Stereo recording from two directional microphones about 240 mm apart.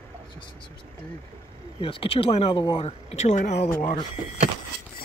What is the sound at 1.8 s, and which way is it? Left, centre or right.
Speech, left.